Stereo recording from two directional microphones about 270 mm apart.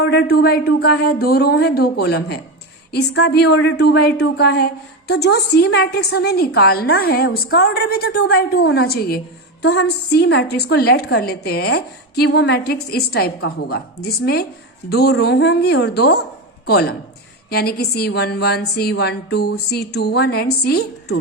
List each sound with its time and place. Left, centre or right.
0.0 s a woman's voice: left